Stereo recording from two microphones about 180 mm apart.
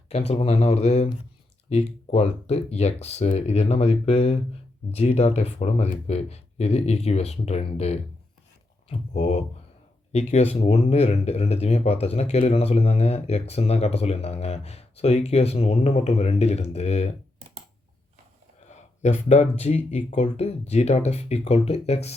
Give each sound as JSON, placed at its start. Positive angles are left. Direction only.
{"t": 0.1, "sound": "speech", "side_deg": 35}
{"t": 18.7, "sound": "speech", "side_deg": 40}